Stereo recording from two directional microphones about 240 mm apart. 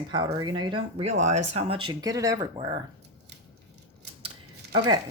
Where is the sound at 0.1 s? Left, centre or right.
Centre.